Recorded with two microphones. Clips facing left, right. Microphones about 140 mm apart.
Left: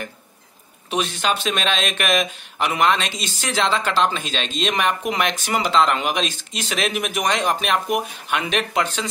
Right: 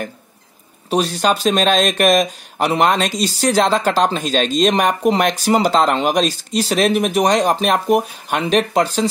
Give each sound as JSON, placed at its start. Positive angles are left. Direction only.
{"t": 0.8, "sound": "speech", "side_deg": -35}